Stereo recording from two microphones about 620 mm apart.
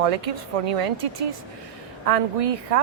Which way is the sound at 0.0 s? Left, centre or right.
Right.